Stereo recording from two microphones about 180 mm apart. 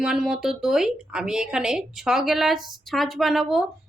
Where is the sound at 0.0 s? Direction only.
5° right (ahead or behind).